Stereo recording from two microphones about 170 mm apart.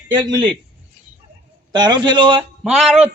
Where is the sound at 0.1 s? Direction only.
25° right (ahead or behind).